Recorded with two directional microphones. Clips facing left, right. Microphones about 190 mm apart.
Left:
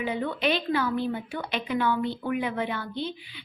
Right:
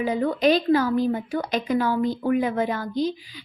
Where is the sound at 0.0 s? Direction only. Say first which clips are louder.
Right 6 dB; 40° right (ahead or behind).